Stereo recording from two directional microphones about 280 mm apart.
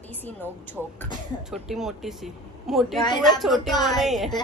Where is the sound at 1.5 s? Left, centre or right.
Centre.